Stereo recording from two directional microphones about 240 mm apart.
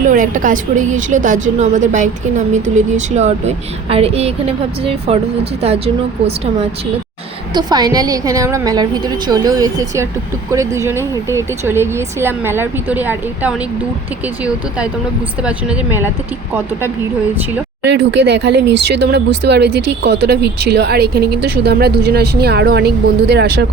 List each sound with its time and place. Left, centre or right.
0.0 s a woman's voice: right; by 13.6 s centre
17.8 s a woman's voice: right